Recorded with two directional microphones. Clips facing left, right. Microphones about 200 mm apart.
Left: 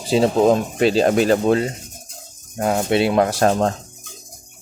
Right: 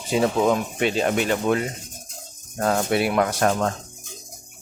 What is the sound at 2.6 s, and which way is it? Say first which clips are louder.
Speech: left 3 dB; 15° left (ahead or behind).